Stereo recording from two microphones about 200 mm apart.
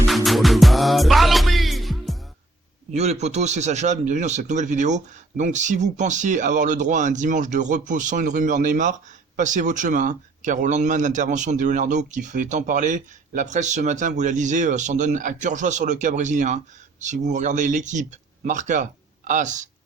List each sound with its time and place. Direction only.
0.3 s music: centre (ahead or behind)
2.9 s speech: 35° right (ahead or behind)